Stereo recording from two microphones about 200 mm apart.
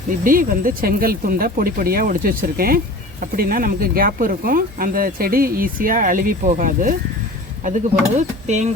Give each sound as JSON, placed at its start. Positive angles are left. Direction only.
{"t": 0.3, "sound": "speech", "side_deg": -45}